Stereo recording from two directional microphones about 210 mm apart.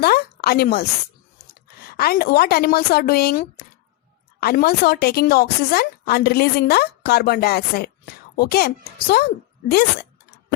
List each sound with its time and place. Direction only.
0.0 s a woman's voice: 45° left (ahead or behind)